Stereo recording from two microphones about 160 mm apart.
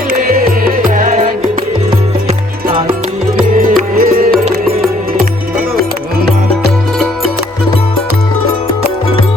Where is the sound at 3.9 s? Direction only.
65° right (ahead or behind).